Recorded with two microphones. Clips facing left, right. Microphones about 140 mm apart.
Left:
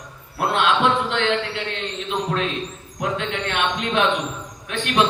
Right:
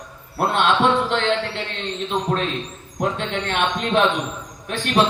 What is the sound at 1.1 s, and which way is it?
Speech, 35° right (ahead or behind).